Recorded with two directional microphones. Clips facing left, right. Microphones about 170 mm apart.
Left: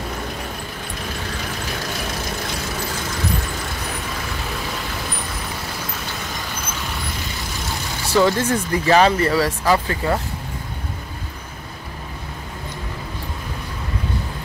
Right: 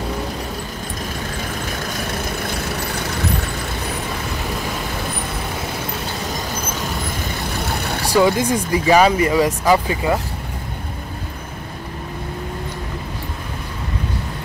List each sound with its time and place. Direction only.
7.5 s vehicle: 60° right (ahead or behind)
8.1 s speech: 15° right (ahead or behind)